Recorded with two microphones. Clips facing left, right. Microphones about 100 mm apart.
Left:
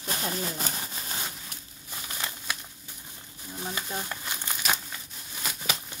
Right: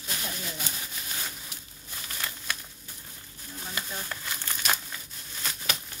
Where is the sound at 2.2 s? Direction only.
25° left (ahead or behind).